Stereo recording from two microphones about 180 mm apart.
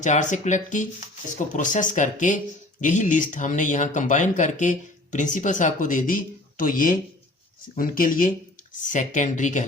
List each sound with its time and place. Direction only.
0.0 s speech: 40° left (ahead or behind)